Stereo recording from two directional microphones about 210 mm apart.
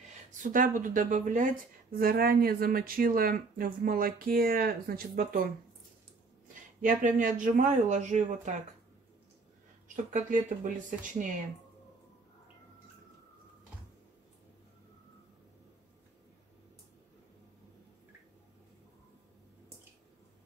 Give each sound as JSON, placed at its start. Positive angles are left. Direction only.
{"t": 0.3, "sound": "speech", "side_deg": -40}
{"t": 10.1, "sound": "speech", "side_deg": -40}